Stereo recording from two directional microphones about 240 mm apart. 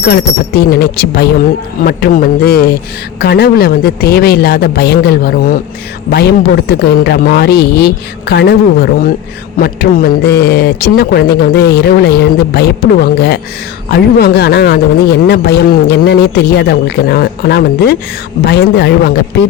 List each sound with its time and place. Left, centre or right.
0.0 s a man's voice: left